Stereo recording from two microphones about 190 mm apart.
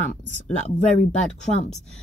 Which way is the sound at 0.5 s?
40° left (ahead or behind).